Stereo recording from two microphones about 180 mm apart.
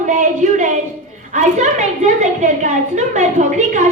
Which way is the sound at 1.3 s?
40° right (ahead or behind).